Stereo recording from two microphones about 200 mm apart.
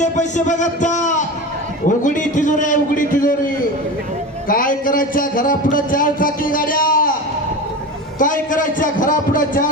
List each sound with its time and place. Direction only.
0.0 s a man's voice: 35° left (ahead or behind)
4.4 s speech: 45° left (ahead or behind)
8.2 s speech: 40° left (ahead or behind)